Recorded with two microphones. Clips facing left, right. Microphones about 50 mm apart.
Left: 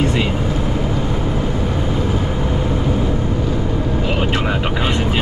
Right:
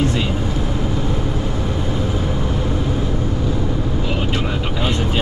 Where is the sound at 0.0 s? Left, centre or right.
Centre.